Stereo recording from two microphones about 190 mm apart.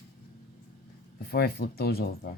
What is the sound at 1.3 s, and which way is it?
Speech, 55° left (ahead or behind).